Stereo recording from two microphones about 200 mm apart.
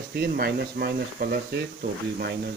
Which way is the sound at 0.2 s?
50° right (ahead or behind).